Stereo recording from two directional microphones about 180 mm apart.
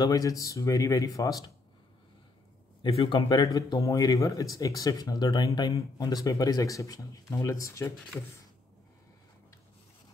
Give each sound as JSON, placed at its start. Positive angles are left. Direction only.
{"t": 0.0, "sound": "speech", "side_deg": 20}
{"t": 2.8, "sound": "speech", "side_deg": 25}